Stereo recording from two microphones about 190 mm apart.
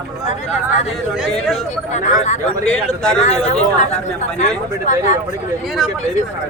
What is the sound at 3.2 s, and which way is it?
Speech, 35° left (ahead or behind).